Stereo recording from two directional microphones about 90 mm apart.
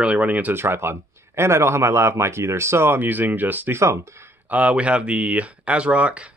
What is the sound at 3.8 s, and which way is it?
Speech, 30° right (ahead or behind).